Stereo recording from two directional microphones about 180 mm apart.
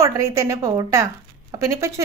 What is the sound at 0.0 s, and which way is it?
A woman's voice, 15° right (ahead or behind).